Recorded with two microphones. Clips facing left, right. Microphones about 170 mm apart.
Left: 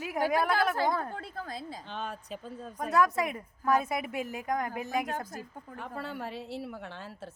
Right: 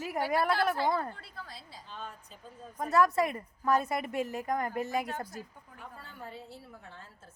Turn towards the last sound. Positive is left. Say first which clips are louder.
# left 9 dB
turn(degrees=80)